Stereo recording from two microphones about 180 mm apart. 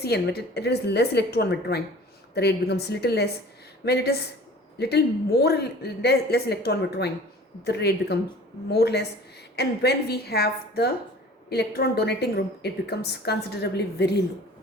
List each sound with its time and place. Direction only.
0.0 s a woman's voice: 60° left (ahead or behind)